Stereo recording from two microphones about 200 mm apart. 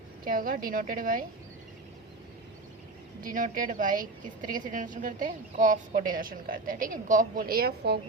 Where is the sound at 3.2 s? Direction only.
40° right (ahead or behind).